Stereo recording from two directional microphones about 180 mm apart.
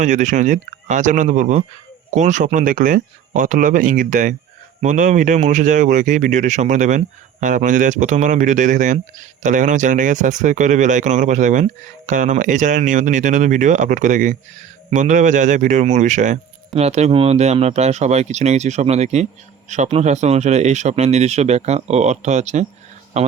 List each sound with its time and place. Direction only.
0.0 s speech: 45° right (ahead or behind)